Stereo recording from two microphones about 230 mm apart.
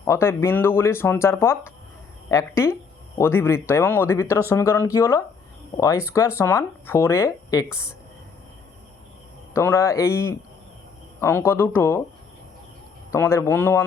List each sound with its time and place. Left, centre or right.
0.0 s speech: centre
9.5 s speech: centre
13.1 s speech: centre